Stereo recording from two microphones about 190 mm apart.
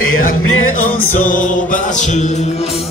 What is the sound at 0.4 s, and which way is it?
Music, 90° left.